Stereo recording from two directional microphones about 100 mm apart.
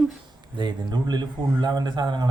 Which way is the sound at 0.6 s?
50° right (ahead or behind).